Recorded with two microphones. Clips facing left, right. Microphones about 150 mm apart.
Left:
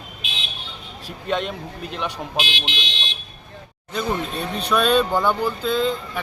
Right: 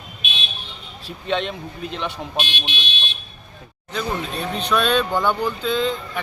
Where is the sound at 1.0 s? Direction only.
5° left (ahead or behind).